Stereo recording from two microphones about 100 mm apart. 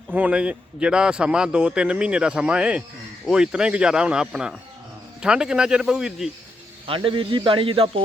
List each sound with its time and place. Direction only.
0.1 s speech: 15° right (ahead or behind)
6.8 s speech: 60° right (ahead or behind)